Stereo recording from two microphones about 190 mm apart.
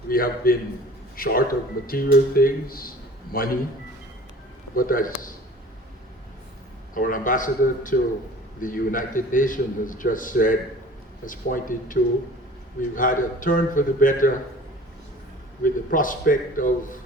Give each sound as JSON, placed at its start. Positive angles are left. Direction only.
{"t": 0.1, "sound": "a man's voice", "side_deg": 50}
{"t": 4.7, "sound": "a man's voice", "side_deg": 50}
{"t": 6.9, "sound": "a man's voice", "side_deg": 45}
{"t": 13.0, "sound": "a man's voice", "side_deg": 45}
{"t": 15.6, "sound": "a man's voice", "side_deg": 45}